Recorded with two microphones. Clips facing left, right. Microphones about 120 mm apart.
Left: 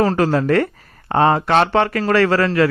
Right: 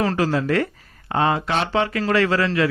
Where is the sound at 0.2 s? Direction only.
50° left (ahead or behind).